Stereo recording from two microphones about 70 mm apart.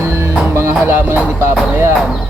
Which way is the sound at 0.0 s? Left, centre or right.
Right.